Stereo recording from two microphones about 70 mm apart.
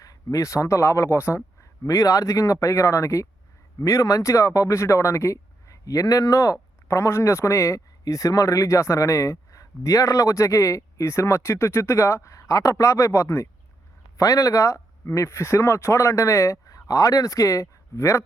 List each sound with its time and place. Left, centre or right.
0.0 s speech: left